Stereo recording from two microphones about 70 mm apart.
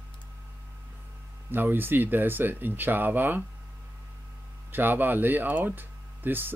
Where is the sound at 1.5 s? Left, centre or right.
Right.